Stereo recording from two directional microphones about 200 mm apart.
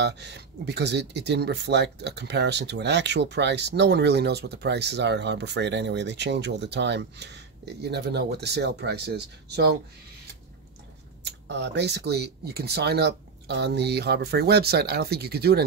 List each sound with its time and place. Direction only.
0.0 s speech: 60° right (ahead or behind)
11.4 s speech: 60° right (ahead or behind)